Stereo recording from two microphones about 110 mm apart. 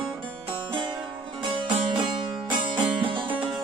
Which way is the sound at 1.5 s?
50° right (ahead or behind).